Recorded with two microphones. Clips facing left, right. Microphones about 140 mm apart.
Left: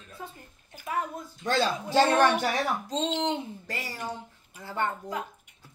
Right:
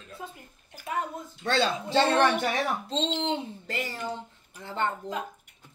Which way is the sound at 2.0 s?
25° right (ahead or behind).